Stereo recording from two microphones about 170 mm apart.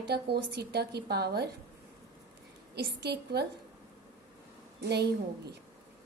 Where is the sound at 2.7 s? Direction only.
75° right (ahead or behind).